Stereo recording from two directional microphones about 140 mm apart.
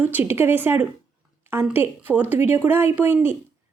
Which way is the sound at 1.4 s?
15° right (ahead or behind).